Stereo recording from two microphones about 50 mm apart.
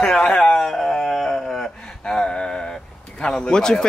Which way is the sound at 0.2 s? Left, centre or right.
Centre.